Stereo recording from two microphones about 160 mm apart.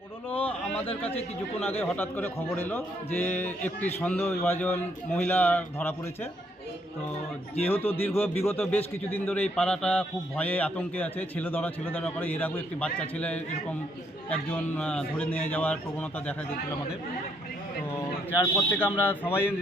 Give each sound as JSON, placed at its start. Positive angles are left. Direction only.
{"t": 0.3, "sound": "a sound", "side_deg": 10}
{"t": 0.9, "sound": "speech", "side_deg": 40}
{"t": 1.8, "sound": "a man's voice", "side_deg": 10}
{"t": 7.6, "sound": "a man's voice", "side_deg": 10}
{"t": 18.5, "sound": "a man's voice", "side_deg": 10}